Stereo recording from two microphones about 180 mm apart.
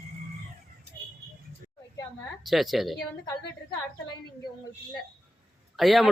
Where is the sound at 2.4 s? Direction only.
Centre (ahead or behind).